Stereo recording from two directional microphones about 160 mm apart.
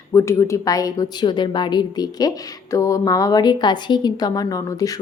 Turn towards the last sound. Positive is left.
turn(degrees=20)  # may be behind; listen again after turning